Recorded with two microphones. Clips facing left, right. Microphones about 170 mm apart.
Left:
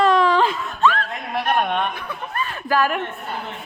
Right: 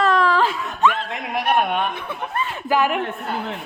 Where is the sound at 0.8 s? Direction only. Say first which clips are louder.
Even; 20° right (ahead or behind).